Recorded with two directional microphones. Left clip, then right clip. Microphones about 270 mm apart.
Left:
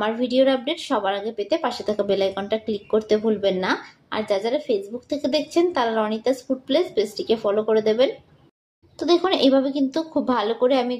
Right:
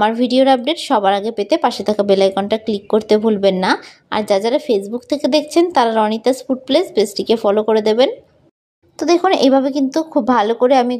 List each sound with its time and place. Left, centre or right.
0.0 s speech: right